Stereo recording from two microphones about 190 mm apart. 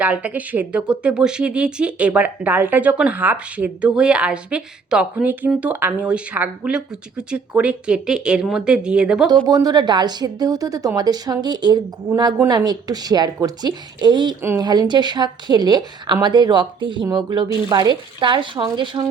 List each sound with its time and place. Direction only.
0.0 s speech: 5° right (ahead or behind)
9.5 s a woman's voice: 20° right (ahead or behind)